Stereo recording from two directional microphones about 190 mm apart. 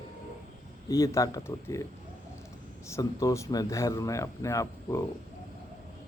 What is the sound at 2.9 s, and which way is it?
Speech, 20° left (ahead or behind).